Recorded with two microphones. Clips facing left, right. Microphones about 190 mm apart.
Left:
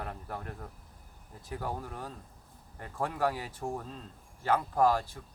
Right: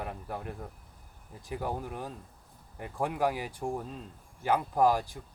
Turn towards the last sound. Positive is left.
turn(degrees=-15)  # may be behind; listen again after turning